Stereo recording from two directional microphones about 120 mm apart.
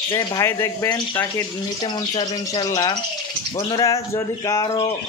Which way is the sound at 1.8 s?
35° left (ahead or behind).